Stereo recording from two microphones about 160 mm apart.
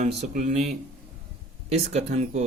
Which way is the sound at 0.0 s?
45° right (ahead or behind).